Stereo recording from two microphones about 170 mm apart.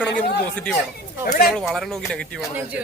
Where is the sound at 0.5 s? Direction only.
5° left (ahead or behind).